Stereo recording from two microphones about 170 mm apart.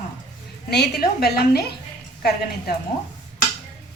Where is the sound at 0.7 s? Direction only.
70° left (ahead or behind).